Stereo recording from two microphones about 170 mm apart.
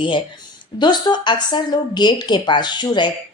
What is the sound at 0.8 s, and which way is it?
A woman's voice, 25° left (ahead or behind).